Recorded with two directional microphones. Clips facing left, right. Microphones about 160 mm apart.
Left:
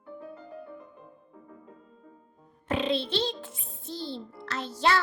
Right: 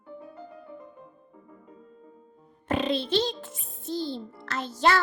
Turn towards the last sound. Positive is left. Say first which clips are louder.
# right 2 dB
turn(degrees=-45)  # may be behind; listen again after turning